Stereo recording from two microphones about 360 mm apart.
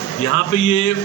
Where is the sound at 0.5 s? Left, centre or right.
Left.